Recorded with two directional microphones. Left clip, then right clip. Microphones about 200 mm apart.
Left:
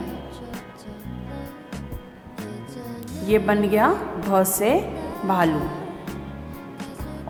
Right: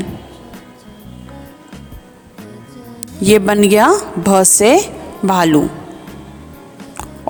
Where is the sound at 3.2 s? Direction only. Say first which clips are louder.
Right 9 dB; 50° right (ahead or behind).